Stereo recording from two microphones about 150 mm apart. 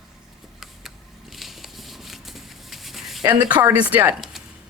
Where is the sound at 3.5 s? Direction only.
10° right (ahead or behind).